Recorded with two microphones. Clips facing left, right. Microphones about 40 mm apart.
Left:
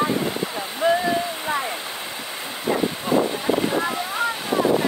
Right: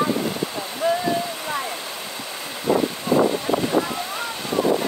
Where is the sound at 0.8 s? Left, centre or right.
Centre.